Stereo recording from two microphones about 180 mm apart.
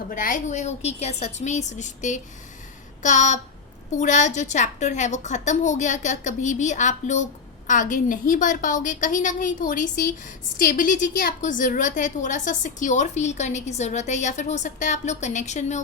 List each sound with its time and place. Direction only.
0.1 s a woman's voice: 50° left (ahead or behind)